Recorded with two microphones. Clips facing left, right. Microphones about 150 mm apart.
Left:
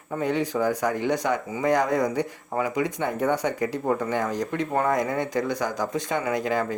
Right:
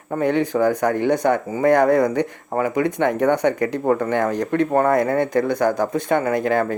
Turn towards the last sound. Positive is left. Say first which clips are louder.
# right 6 dB
turn(degrees=-55)  # may be behind; listen again after turning